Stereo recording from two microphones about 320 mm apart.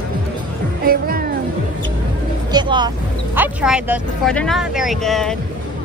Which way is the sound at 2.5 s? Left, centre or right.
Centre.